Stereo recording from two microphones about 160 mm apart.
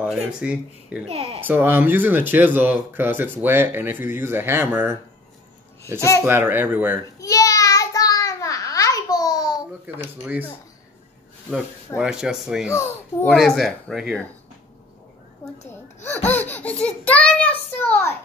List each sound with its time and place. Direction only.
0.1 s speech: 5° right (ahead or behind)
1.0 s speech: 40° right (ahead or behind)
1.4 s speech: 15° right (ahead or behind)
5.9 s a child's voice: 20° left (ahead or behind)
6.2 s speech: 15° right (ahead or behind)
7.2 s babbling: 20° left (ahead or behind)
12.0 s speech: 5° right (ahead or behind)
12.6 s a child's voice: 15° left (ahead or behind)
13.3 s speech: centre (ahead or behind)
15.7 s a sound: 15° left (ahead or behind)
16.3 s a child's voice: 10° left (ahead or behind)